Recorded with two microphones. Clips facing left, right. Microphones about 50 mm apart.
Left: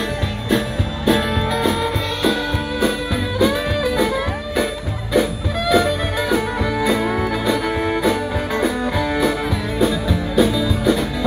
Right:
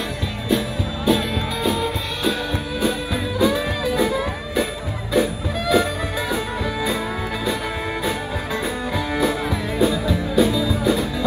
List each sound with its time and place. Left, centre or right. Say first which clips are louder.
0.5 s music: left 2 dB; left